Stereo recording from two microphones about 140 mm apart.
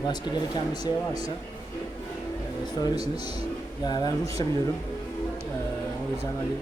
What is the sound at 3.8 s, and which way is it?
Speech, 30° left (ahead or behind).